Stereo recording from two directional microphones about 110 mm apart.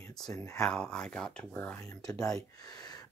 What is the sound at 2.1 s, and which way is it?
Speech, 35° left (ahead or behind).